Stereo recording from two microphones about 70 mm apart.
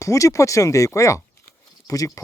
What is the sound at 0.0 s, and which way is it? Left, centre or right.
Speech, left.